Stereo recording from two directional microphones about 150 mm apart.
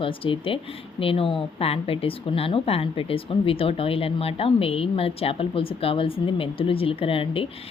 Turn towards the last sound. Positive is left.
turn(degrees=40)  # may be behind; listen again after turning